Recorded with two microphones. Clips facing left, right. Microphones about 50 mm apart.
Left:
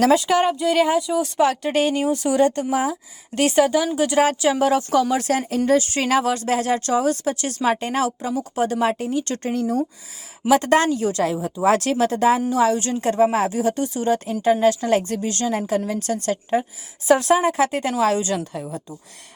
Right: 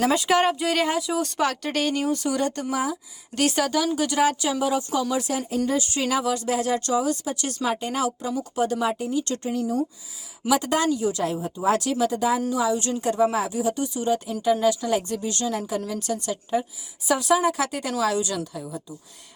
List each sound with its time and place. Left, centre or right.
0.1 s speech: centre
1.7 s a woman's voice: left
5.8 s speech: left
8.9 s a woman's voice: left
9.2 s speech: left
9.5 s a woman's voice: left
11.1 s a woman's voice: left
12.7 s speech: left
14.5 s speech: left
15.2 s speech: left